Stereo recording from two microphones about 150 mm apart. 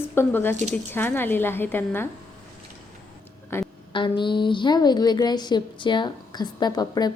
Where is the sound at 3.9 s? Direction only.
35° left (ahead or behind).